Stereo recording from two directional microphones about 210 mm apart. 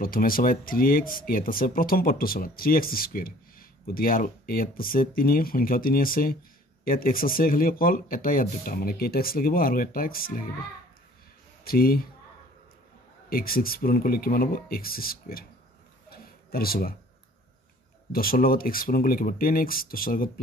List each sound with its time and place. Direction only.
0.0 s speech: 45° left (ahead or behind)
11.6 s speech: 45° left (ahead or behind)
13.3 s speech: 45° left (ahead or behind)
16.1 s a sound: 45° left (ahead or behind)
18.1 s speech: 45° left (ahead or behind)